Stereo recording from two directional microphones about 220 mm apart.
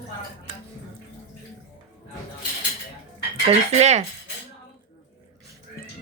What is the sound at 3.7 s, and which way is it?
Speech, 30° right (ahead or behind).